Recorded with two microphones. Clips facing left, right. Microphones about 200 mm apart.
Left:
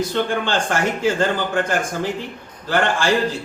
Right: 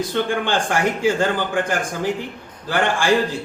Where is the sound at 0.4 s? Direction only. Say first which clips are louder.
Right 1 dB; 15° right (ahead or behind).